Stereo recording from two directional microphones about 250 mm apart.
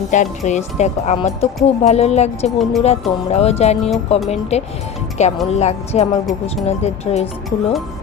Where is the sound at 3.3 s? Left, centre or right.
Left.